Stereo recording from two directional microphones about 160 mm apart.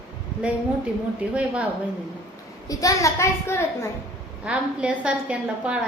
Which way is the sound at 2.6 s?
20° left (ahead or behind).